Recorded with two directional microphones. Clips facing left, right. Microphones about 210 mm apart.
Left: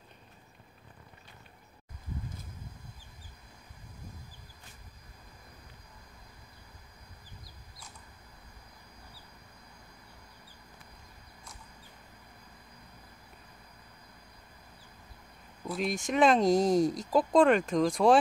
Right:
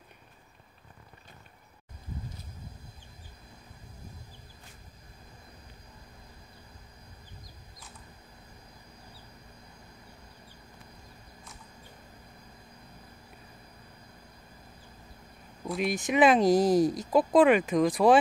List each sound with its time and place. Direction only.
15.6 s speech: centre (ahead or behind)